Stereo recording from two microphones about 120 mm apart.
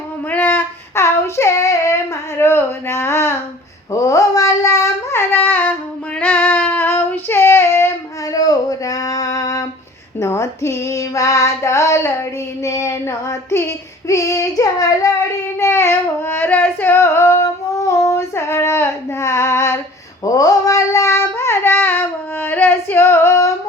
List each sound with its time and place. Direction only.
0.3 s child singing: 15° left (ahead or behind)
2.4 s a sound: 20° left (ahead or behind)
6.1 s female singing: 10° left (ahead or behind)
8.3 s a sound: 30° left (ahead or behind)
10.2 s female singing: 25° left (ahead or behind)
12.6 s child singing: 25° left (ahead or behind)
15.5 s singing: 25° left (ahead or behind)
20.2 s child singing: 30° left (ahead or behind)